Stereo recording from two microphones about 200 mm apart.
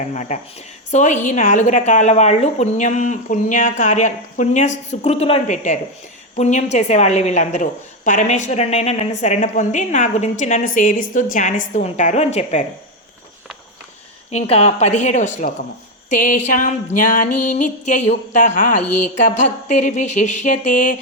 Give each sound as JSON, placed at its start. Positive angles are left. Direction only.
{"t": 0.0, "sound": "a woman's voice", "side_deg": 35}
{"t": 14.3, "sound": "a woman's voice", "side_deg": 30}